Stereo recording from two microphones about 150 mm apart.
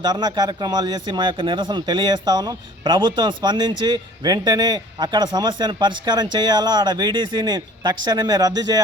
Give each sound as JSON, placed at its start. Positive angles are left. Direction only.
{"t": 0.0, "sound": "a man's voice", "side_deg": -30}